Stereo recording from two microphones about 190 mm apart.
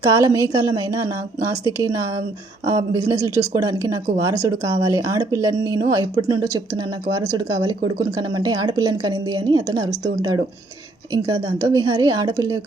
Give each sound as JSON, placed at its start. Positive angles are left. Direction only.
{"t": 0.1, "sound": "speech", "side_deg": -15}
{"t": 11.7, "sound": "speech", "side_deg": -20}